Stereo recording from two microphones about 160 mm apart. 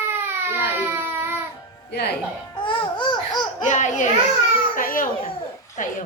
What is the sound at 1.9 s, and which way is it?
Speech, 90° left.